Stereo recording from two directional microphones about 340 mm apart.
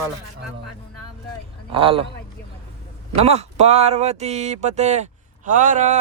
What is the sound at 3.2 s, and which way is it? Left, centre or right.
Speech, centre.